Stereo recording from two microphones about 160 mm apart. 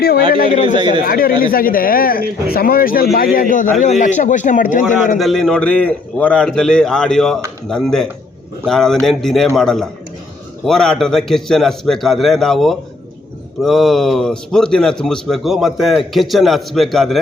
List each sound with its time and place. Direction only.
0.3 s speech: 60° left (ahead or behind)
5.1 s a man's voice: centre (ahead or behind)